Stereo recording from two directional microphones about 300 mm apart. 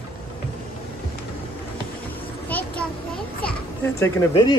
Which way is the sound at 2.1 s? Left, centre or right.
Centre.